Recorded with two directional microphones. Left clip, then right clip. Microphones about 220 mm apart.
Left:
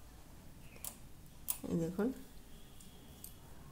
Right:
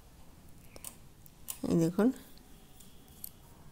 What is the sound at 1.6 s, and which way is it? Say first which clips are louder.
Speech: right 9 dB; 45° right (ahead or behind).